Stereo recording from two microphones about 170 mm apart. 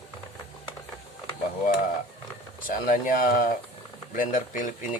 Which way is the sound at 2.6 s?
50° left (ahead or behind).